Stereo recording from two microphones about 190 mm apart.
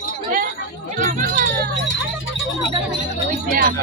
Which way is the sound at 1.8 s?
80° left.